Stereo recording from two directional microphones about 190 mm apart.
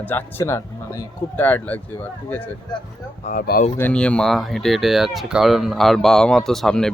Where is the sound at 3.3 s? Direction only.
50° left (ahead or behind).